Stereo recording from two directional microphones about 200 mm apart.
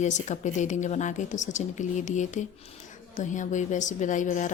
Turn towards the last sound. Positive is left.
turn(degrees=40)  # may be behind; listen again after turning